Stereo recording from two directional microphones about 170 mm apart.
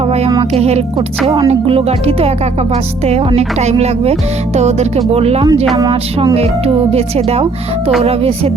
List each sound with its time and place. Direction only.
0.5 s speech: 40° right (ahead or behind)
6.9 s speech: 35° right (ahead or behind)